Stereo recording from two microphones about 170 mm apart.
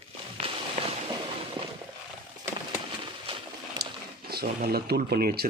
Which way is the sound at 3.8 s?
70° right (ahead or behind).